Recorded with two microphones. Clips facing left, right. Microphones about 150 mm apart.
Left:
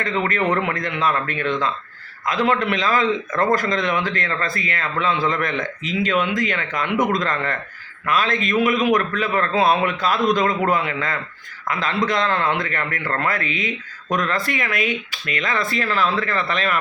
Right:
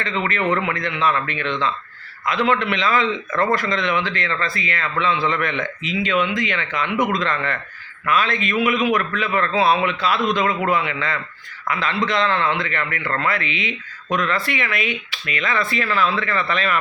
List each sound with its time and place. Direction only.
0.2 s a man's voice: 45° left (ahead or behind)